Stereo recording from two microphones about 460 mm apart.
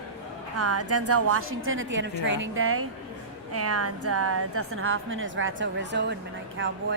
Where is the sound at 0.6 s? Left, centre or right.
Right.